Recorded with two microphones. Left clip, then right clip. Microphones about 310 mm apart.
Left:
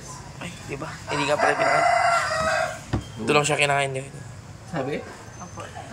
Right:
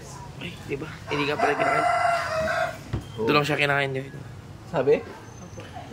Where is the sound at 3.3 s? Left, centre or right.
Centre.